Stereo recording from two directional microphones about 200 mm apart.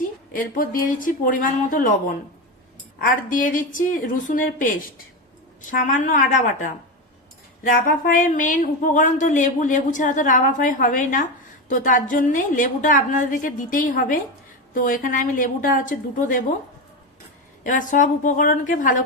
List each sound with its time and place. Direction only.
0.3 s speech: 45° left (ahead or behind)
17.7 s speech: 40° left (ahead or behind)